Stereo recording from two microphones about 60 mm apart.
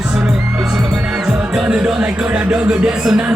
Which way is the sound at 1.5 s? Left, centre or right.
Centre.